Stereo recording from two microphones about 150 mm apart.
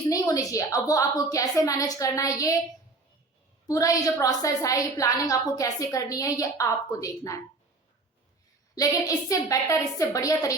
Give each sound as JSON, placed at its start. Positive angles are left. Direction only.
{"t": 0.1, "sound": "a woman's voice", "side_deg": 25}
{"t": 3.7, "sound": "a woman's voice", "side_deg": 25}
{"t": 8.7, "sound": "a woman's voice", "side_deg": 25}